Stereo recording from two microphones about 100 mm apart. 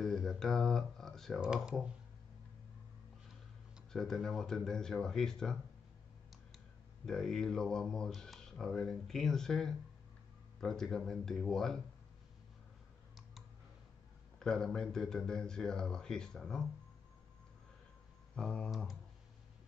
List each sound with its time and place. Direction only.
0.0 s a sound: centre (ahead or behind)
3.9 s speech: 5° left (ahead or behind)
7.1 s speech: 5° left (ahead or behind)
14.4 s speech: 5° left (ahead or behind)
18.3 s speech: 10° left (ahead or behind)